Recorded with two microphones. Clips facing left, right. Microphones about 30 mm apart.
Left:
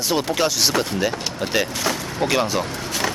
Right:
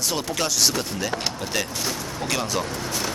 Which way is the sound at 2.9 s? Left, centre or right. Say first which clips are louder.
Left 4 dB; left.